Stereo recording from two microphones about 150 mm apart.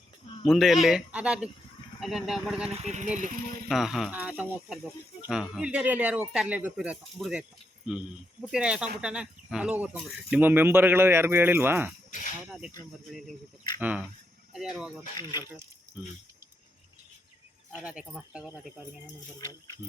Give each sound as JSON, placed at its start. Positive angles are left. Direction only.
{"t": 0.4, "sound": "speech", "side_deg": 0}
{"t": 2.6, "sound": "speech", "side_deg": -45}
{"t": 3.7, "sound": "speech", "side_deg": 0}
{"t": 13.8, "sound": "speech", "side_deg": -10}
{"t": 15.1, "sound": "speech", "side_deg": 25}
{"t": 16.0, "sound": "speech", "side_deg": -5}
{"t": 17.7, "sound": "speech", "side_deg": -10}
{"t": 19.5, "sound": "speech", "side_deg": 25}